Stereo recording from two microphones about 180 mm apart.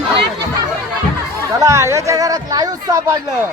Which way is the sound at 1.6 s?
15° right (ahead or behind).